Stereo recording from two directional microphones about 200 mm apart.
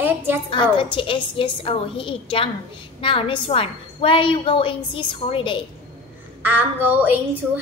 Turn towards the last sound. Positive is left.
turn(degrees=-10)  # may be behind; listen again after turning